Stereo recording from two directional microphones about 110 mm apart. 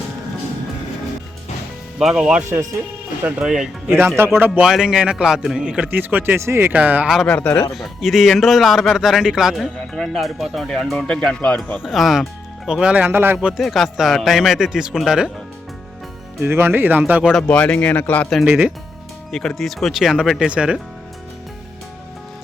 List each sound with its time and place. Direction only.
2.0 s speech: 5° right (ahead or behind)
2.5 s speech: 30° right (ahead or behind)
3.2 s a man's voice: 10° right (ahead or behind)
3.8 s speech: 20° right (ahead or behind)
4.6 s a man's voice: 5° right (ahead or behind)
7.3 s speech: 10° left (ahead or behind)
7.8 s speech: centre (ahead or behind)
11.8 s a man's voice: 5° right (ahead or behind); by 13.4 s 20° right (ahead or behind)
13.6 s speech: centre (ahead or behind)
16.4 s speech: 20° right (ahead or behind)
17.5 s speech: 10° left (ahead or behind)
18.4 s a man's voice: 10° right (ahead or behind)
19.3 s a man's voice: 5° left (ahead or behind)